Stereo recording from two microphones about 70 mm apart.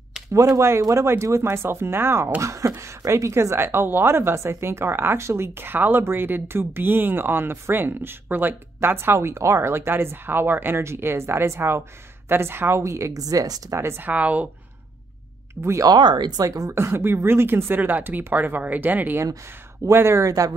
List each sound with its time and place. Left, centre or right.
0.3 s a woman's voice: right
13.7 s speech: right
14.0 s speech: right
15.8 s speech: right
16.7 s speech: right
19.9 s a woman's voice: right